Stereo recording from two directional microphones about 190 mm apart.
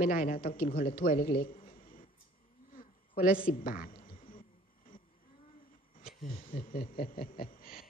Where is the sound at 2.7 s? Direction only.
45° left (ahead or behind).